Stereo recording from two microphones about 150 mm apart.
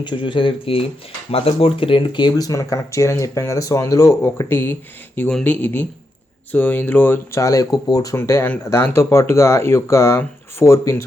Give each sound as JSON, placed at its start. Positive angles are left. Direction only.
{"t": 0.0, "sound": "speech", "side_deg": 30}